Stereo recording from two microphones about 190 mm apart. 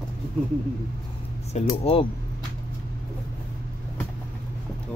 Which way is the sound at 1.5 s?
30° left (ahead or behind).